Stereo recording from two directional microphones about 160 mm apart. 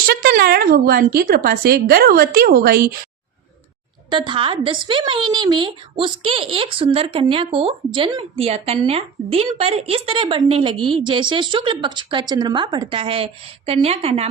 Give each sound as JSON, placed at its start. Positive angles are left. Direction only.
{"t": 0.1, "sound": "speech", "side_deg": -65}
{"t": 4.1, "sound": "a woman's voice", "side_deg": -30}